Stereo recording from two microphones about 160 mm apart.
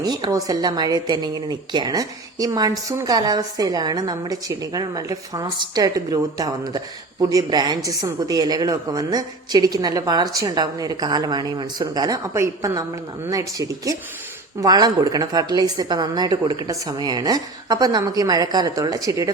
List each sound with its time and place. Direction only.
0.0 s a woman's voice: 25° right (ahead or behind)